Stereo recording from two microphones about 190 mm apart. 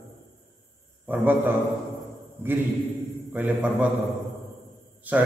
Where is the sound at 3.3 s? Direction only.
10° right (ahead or behind).